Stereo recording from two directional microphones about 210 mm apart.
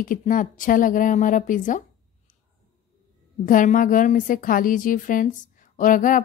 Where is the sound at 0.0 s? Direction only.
40° left (ahead or behind).